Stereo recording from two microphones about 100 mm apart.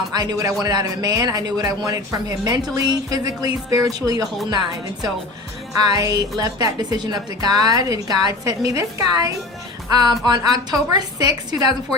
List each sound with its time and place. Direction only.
0.1 s a man's voice: 40° right (ahead or behind)
5.7 s a man's voice: 40° right (ahead or behind)